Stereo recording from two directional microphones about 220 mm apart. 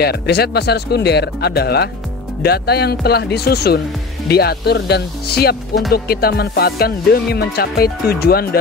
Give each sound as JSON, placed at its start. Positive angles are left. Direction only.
{"t": 0.0, "sound": "music", "side_deg": 45}